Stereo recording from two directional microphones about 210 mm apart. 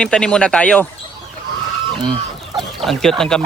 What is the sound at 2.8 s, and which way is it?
Speech, centre (ahead or behind).